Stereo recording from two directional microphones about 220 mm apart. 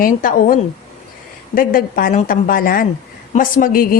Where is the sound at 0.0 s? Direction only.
40° left (ahead or behind).